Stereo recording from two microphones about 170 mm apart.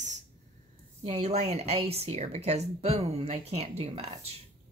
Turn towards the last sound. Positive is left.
turn(degrees=-35)  # may be behind; listen again after turning